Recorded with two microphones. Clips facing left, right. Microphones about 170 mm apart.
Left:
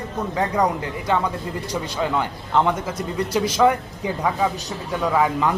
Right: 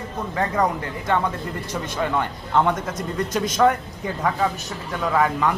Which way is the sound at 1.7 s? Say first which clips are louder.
Left 1 dB; 15° left (ahead or behind).